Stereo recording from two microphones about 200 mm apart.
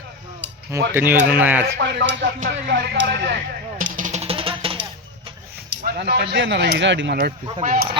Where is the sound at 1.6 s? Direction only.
60° right (ahead or behind).